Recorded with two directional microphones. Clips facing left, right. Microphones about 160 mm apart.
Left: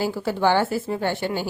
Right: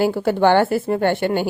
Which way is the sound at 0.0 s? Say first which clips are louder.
Right 6 dB; 55° right (ahead or behind).